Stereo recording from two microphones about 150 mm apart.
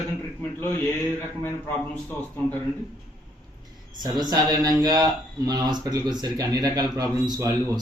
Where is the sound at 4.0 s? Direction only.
25° right (ahead or behind).